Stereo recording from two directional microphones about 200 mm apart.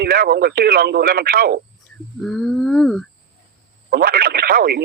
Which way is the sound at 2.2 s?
Centre (ahead or behind).